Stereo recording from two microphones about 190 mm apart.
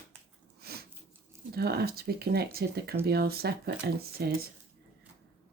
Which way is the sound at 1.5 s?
55° right (ahead or behind).